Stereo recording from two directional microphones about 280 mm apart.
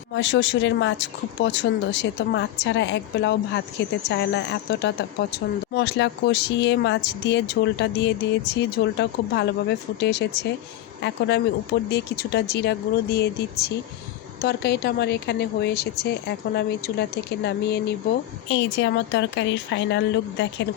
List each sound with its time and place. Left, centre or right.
0.1 s speech: left
11.9 s speech: left